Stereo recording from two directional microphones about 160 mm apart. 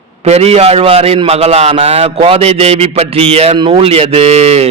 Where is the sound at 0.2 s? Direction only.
40° right (ahead or behind).